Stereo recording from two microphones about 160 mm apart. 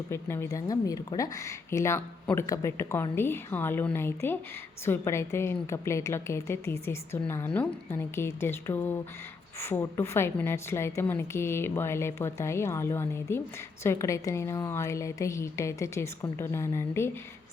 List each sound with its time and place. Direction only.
0.1 s a woman's voice: 15° left (ahead or behind)